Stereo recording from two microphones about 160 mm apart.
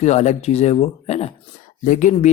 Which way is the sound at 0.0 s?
45° left (ahead or behind).